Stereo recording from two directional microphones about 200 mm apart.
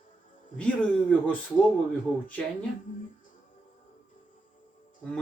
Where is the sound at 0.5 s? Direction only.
5° left (ahead or behind).